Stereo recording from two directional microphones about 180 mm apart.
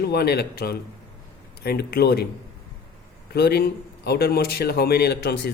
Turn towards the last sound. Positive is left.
turn(degrees=65)  # may be behind; listen again after turning